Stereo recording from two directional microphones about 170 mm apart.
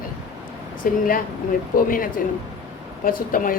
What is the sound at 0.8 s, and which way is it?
A woman's voice, 55° left (ahead or behind).